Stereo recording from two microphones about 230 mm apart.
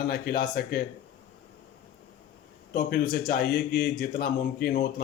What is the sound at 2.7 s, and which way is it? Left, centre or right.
Speech, left.